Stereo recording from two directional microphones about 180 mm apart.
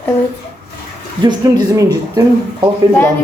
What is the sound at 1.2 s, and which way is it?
Speech, 20° right (ahead or behind).